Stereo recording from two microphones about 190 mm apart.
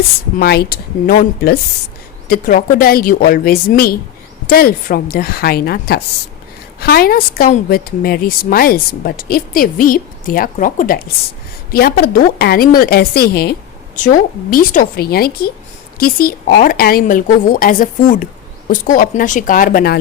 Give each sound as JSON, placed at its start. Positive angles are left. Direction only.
{"t": 0.3, "sound": "a woman's voice", "side_deg": 55}